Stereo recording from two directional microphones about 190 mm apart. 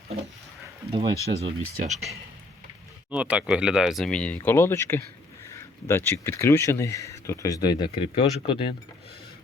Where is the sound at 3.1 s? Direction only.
5° right (ahead or behind).